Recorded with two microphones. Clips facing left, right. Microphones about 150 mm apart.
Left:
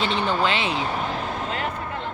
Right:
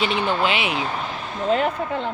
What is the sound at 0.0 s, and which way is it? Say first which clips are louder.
Speech: right 1 dB; 15° right (ahead or behind).